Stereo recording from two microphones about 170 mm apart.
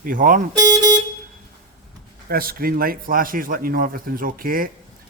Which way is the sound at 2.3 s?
60° right (ahead or behind).